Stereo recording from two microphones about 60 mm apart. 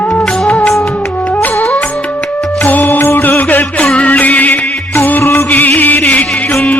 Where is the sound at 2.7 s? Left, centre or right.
Left.